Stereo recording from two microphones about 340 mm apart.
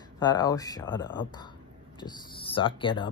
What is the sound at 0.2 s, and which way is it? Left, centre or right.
Speech, centre.